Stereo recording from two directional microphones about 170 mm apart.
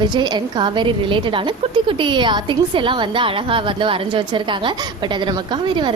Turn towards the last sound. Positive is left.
turn(degrees=-30)  # may be behind; listen again after turning